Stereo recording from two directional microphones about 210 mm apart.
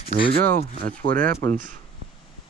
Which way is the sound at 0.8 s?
45° right (ahead or behind).